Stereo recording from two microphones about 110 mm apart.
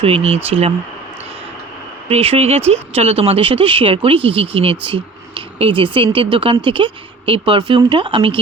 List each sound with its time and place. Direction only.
0.0 s speech: 65° right (ahead or behind)
2.0 s speech: 65° right (ahead or behind)